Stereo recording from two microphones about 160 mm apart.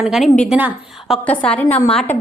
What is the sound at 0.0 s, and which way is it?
A woman's voice, centre (ahead or behind).